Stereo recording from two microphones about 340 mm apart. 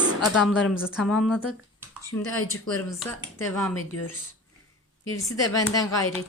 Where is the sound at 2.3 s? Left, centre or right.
Right.